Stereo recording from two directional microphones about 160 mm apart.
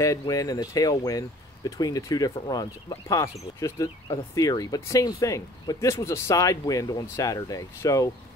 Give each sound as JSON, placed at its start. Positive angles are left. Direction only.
{"t": 0.0, "sound": "speech", "side_deg": 20}